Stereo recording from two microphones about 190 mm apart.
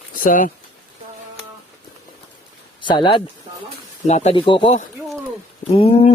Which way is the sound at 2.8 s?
25° left (ahead or behind).